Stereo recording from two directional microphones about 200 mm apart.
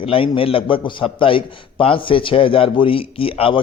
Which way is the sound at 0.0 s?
25° left (ahead or behind).